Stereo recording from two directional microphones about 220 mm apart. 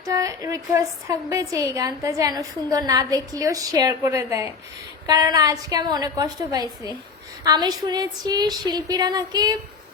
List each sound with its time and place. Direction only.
0.0 s a woman's voice: 15° right (ahead or behind)